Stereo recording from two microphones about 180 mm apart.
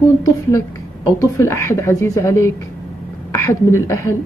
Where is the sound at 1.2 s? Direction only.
15° left (ahead or behind).